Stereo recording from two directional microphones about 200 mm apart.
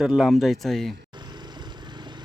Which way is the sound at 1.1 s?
20° right (ahead or behind).